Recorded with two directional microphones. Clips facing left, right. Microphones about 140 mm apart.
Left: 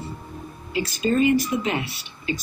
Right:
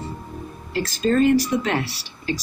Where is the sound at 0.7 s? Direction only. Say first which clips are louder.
Right 2 dB; 5° left (ahead or behind).